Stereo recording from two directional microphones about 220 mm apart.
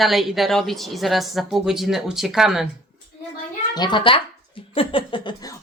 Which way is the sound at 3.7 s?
20° left (ahead or behind).